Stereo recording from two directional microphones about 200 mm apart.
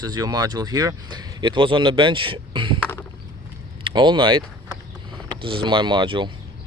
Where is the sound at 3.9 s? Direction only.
25° right (ahead or behind).